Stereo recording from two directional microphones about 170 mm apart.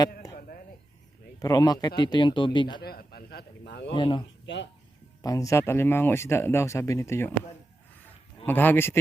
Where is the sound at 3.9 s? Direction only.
30° left (ahead or behind).